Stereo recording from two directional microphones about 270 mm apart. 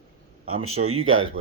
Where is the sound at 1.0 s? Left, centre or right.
Right.